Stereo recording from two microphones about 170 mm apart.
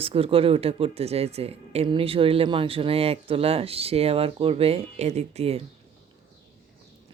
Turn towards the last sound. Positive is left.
turn(degrees=-35)  # may be behind; listen again after turning